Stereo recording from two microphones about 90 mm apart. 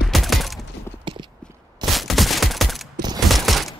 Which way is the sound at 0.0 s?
Centre (ahead or behind).